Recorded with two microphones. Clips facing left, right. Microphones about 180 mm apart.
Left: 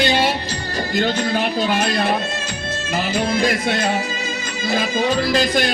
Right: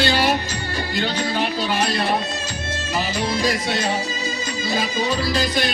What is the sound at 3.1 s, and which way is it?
Music, 55° left (ahead or behind).